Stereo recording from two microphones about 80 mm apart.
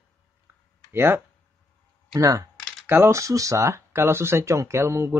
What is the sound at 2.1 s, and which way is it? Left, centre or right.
Speech, right.